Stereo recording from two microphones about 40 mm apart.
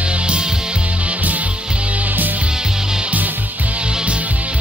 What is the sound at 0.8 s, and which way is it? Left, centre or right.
Music, right.